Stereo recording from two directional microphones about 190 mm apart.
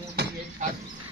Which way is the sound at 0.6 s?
40° right (ahead or behind).